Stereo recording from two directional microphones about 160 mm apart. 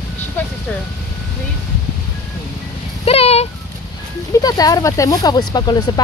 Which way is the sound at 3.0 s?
40° left (ahead or behind).